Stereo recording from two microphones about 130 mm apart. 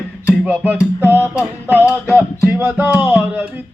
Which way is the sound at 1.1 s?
15° right (ahead or behind).